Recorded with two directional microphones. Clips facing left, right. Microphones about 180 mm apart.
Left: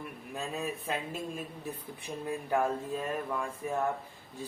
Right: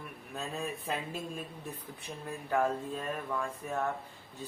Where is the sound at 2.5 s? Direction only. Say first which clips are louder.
Even; 5° left (ahead or behind).